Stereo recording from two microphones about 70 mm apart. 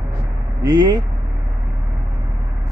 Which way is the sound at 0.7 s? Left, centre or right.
Right.